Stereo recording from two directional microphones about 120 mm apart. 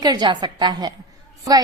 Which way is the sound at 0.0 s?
35° right (ahead or behind).